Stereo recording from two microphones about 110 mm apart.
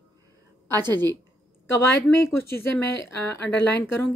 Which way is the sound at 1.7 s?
20° left (ahead or behind).